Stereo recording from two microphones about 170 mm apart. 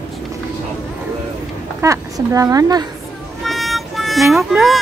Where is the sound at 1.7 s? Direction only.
20° right (ahead or behind).